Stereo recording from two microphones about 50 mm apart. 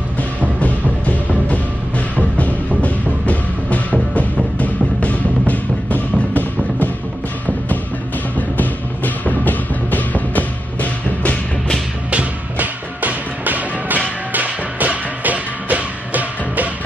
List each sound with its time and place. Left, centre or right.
0.6 s music: left
8.4 s music: left
12.1 s music: right